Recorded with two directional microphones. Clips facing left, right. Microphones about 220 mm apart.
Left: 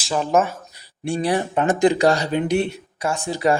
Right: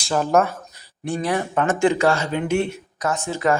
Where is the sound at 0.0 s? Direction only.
Centre (ahead or behind).